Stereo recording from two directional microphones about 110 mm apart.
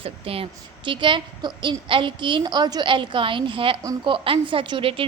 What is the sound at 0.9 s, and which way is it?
A woman's voice, 50° right (ahead or behind).